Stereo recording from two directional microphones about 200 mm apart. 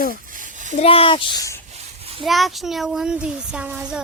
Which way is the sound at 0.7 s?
30° left (ahead or behind).